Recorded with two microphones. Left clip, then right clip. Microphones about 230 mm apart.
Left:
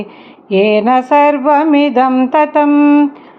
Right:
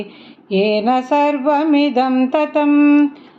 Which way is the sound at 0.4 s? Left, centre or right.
Centre.